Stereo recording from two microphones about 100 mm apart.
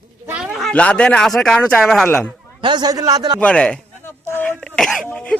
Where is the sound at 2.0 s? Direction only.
15° left (ahead or behind).